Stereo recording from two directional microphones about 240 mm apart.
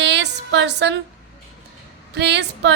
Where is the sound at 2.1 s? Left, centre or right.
Right.